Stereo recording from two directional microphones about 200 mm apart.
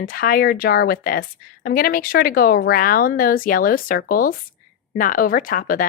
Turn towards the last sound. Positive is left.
turn(degrees=45)  # may be behind; listen again after turning